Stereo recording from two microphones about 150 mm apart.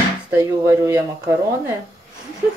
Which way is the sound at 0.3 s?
20° right (ahead or behind).